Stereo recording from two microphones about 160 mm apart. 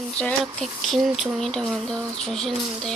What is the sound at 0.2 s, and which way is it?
Speech, 5° left (ahead or behind).